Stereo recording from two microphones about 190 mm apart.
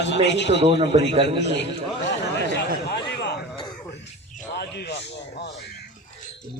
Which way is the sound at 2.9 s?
60° left (ahead or behind).